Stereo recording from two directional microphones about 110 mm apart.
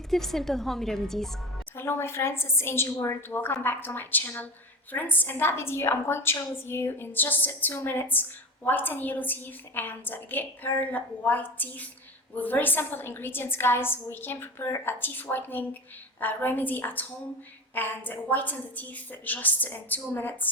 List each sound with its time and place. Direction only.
0.1 s a woman's voice: 5° left (ahead or behind)
1.7 s a woman's voice: 20° left (ahead or behind)